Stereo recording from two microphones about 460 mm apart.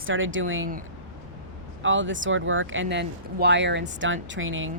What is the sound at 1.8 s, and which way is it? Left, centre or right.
Speech, right.